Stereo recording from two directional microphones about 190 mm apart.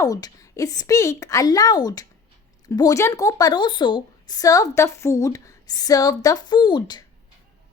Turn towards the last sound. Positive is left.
turn(degrees=25)  # may be behind; listen again after turning